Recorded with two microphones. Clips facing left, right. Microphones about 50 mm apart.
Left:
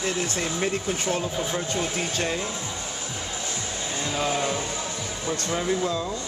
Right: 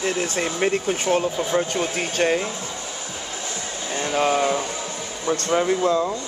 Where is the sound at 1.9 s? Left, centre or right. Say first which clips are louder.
Right 6 dB; right.